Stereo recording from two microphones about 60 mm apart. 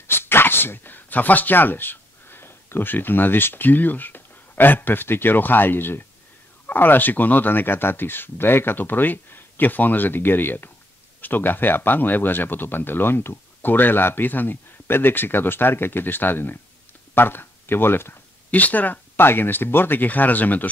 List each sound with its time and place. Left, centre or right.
0.0 s speech: left
18.5 s speech: left